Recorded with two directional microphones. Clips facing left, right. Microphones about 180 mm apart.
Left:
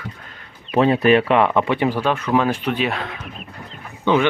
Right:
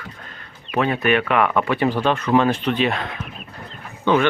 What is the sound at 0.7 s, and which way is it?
Speech, 30° left (ahead or behind).